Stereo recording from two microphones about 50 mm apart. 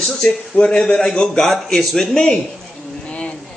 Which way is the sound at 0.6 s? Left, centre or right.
Centre.